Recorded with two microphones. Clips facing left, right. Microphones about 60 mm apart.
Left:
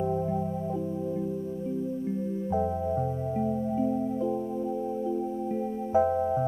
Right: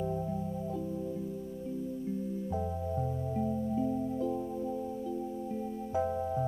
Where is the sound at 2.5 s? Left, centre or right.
Left.